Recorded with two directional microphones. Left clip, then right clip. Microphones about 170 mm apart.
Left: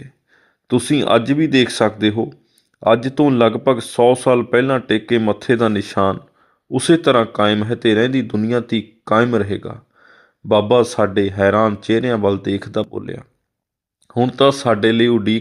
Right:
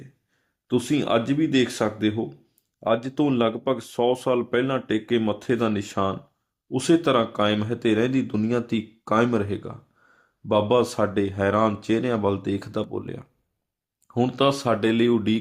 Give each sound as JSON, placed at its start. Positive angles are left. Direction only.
{"t": 0.7, "sound": "speech", "side_deg": 25}